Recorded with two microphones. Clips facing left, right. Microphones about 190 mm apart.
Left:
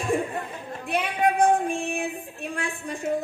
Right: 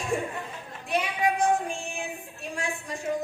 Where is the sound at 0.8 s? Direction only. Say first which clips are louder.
Left 3 dB; 55° left (ahead or behind).